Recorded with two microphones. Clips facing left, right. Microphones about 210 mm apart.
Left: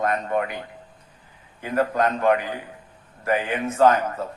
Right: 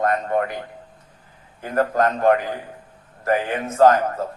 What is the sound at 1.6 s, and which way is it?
A man's voice, 50° right (ahead or behind).